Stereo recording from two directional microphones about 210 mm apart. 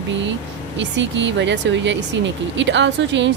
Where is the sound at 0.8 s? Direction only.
60° right (ahead or behind).